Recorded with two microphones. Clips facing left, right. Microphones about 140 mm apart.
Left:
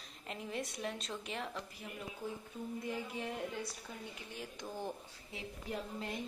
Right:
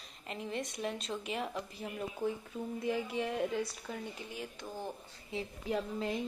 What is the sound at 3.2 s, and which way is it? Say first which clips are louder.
Speech: right 6 dB; 80° right.